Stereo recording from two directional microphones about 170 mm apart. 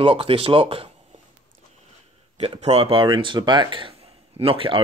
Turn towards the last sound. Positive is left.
turn(degrees=-30)  # may be behind; listen again after turning